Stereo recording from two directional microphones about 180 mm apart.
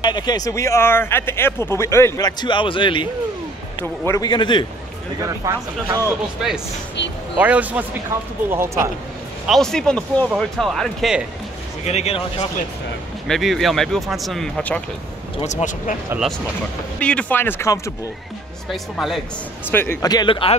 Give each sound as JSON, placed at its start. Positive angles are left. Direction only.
{"t": 0.0, "sound": "speech", "side_deg": 25}
{"t": 5.2, "sound": "speech", "side_deg": -20}
{"t": 7.0, "sound": "speech", "side_deg": 75}
{"t": 7.3, "sound": "a man's voice", "side_deg": -10}
{"t": 9.5, "sound": "speech", "side_deg": 0}
{"t": 11.8, "sound": "a man's voice", "side_deg": 35}
{"t": 13.3, "sound": "speech", "side_deg": 0}
{"t": 15.4, "sound": "speech", "side_deg": 40}
{"t": 16.1, "sound": "speech", "side_deg": -5}
{"t": 18.7, "sound": "speech", "side_deg": 0}
{"t": 19.7, "sound": "speech", "side_deg": 10}